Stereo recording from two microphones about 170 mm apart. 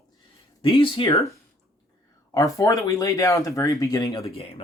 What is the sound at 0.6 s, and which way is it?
Speech, 30° left (ahead or behind).